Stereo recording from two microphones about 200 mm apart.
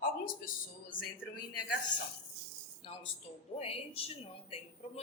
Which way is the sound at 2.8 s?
30° left (ahead or behind).